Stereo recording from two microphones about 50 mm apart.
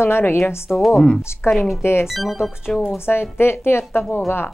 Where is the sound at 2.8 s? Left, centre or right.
Left.